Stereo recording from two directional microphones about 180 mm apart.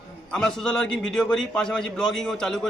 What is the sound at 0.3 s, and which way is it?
A man's voice, 5° left (ahead or behind).